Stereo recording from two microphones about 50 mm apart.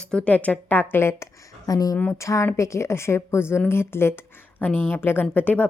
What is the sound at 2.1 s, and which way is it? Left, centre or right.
Speech, left.